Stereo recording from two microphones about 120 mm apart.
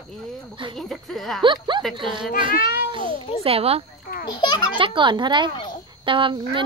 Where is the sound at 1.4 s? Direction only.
40° right (ahead or behind).